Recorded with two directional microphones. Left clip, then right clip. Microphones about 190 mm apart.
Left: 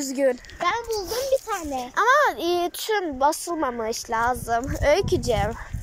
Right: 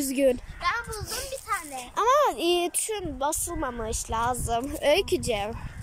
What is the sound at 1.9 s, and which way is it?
A woman's voice, 5° right (ahead or behind).